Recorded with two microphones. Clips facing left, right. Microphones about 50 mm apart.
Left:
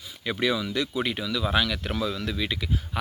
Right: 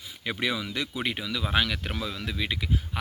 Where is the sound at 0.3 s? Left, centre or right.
Centre.